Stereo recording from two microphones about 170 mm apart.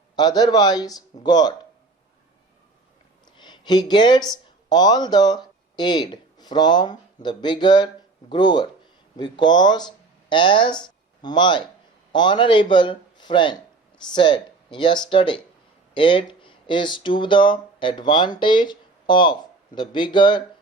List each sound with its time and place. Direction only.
0.2 s speech: 25° left (ahead or behind)
3.3 s speech: 25° left (ahead or behind)